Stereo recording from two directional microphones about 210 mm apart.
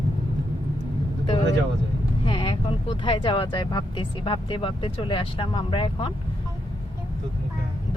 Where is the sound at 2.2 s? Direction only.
20° left (ahead or behind).